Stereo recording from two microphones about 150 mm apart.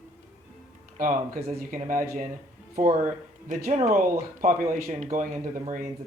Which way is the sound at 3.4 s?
60° right (ahead or behind).